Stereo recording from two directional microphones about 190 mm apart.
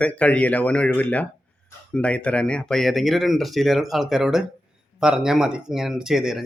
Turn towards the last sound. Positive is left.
turn(degrees=0)  # may be behind; listen again after turning